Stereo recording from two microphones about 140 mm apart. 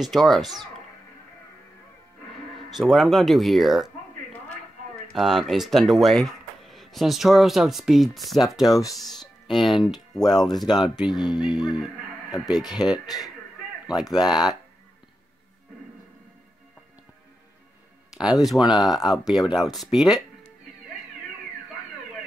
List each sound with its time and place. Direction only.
0.0 s speech: centre (ahead or behind)
2.7 s speech: centre (ahead or behind)
5.1 s speech: centre (ahead or behind)
8.6 s speech: 25° left (ahead or behind)
9.5 s speech: centre (ahead or behind)
10.7 s speech: 30° left (ahead or behind)
12.4 s speech: centre (ahead or behind)
12.6 s speech: 30° left (ahead or behind)
14.0 s speech: 30° left (ahead or behind)
18.1 s speech: 5° right (ahead or behind)